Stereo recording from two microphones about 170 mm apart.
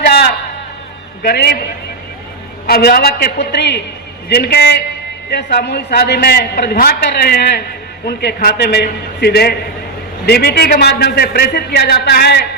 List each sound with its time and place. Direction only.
1.2 s a man's voice: 70° left (ahead or behind)
2.6 s a man's voice: 65° left (ahead or behind); by 3.8 s 90° left
4.3 s a man's voice: 75° left (ahead or behind)